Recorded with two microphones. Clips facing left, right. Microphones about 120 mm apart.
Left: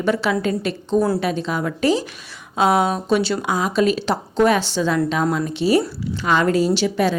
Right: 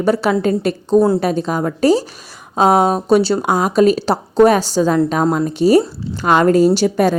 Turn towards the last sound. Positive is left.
turn(degrees=-45)  # may be behind; listen again after turning